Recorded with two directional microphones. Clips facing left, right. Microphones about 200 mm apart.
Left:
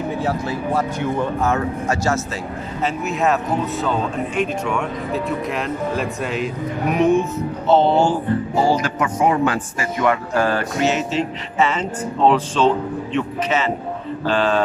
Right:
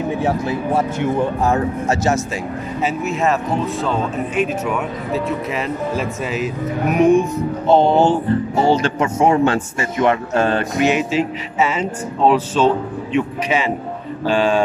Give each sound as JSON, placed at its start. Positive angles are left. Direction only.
{"t": 0.2, "sound": "speech", "side_deg": -25}
{"t": 2.8, "sound": "speech", "side_deg": 0}